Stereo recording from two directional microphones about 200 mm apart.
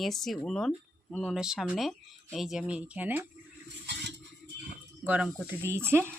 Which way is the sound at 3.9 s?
60° right (ahead or behind).